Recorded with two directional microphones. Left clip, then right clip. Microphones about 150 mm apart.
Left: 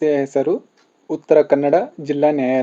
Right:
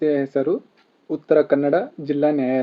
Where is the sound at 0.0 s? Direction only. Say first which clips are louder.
Left 3 dB; 20° left (ahead or behind).